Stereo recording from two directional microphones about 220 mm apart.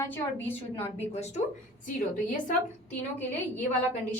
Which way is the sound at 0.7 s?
30° left (ahead or behind).